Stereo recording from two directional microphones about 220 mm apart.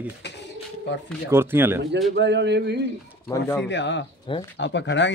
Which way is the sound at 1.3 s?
10° right (ahead or behind).